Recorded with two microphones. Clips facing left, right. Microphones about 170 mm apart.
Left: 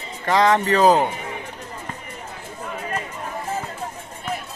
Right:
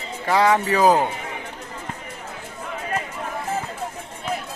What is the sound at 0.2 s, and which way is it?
Speech, 10° right (ahead or behind).